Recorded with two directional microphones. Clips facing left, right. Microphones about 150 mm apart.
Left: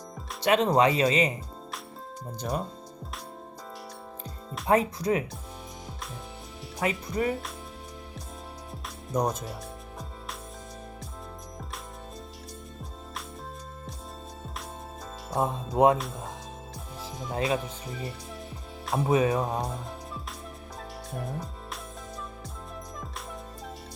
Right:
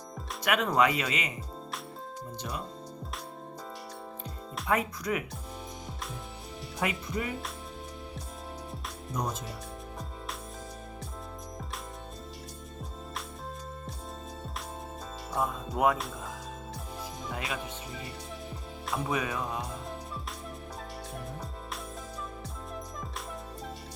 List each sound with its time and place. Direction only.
0.4 s speech: 25° left (ahead or behind)
2.4 s speech: 40° left (ahead or behind)
4.6 s speech: 30° left (ahead or behind)
6.8 s speech: 40° left (ahead or behind)
9.1 s speech: 40° left (ahead or behind)
15.4 s speech: 30° left (ahead or behind)
17.3 s speech: 30° left (ahead or behind)
19.0 s speech: 30° left (ahead or behind)